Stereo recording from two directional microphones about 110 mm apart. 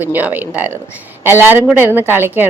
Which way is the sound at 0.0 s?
15° right (ahead or behind).